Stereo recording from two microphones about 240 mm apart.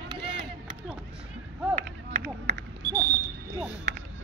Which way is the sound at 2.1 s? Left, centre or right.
Right.